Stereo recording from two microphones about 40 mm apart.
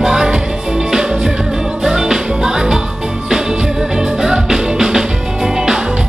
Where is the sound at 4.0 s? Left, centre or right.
Centre.